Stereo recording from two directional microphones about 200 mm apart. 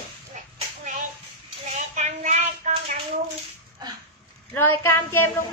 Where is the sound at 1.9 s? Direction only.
35° right (ahead or behind).